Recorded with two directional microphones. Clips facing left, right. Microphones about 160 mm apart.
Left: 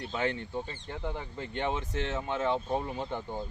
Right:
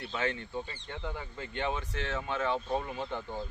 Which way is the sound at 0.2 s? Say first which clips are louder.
Left 2 dB; 20° left (ahead or behind).